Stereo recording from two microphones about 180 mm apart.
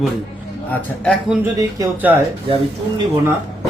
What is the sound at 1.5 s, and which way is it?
Speech, 15° right (ahead or behind).